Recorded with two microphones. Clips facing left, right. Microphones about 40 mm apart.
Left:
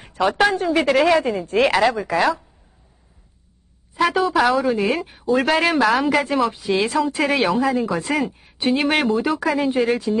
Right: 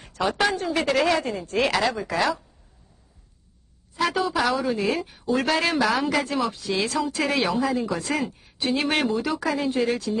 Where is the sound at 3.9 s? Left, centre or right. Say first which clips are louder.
Left 6 dB; centre.